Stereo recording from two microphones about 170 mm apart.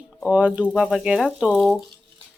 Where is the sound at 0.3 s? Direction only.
5° right (ahead or behind).